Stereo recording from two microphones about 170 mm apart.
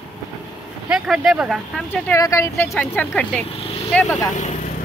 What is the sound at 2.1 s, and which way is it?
Speech, 20° left (ahead or behind).